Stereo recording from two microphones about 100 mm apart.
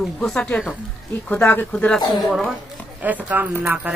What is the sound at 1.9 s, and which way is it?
Speech, 5° left (ahead or behind).